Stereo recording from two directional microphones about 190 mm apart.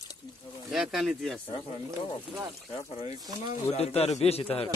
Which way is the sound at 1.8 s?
15° right (ahead or behind).